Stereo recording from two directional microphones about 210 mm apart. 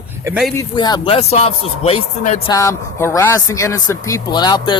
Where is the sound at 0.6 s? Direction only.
20° left (ahead or behind).